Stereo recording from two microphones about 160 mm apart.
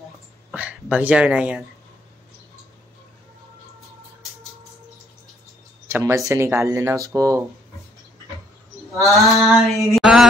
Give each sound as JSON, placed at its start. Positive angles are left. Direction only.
{"t": 0.5, "sound": "speech", "side_deg": -5}
{"t": 5.9, "sound": "speech", "side_deg": -15}
{"t": 9.0, "sound": "a sound", "side_deg": 0}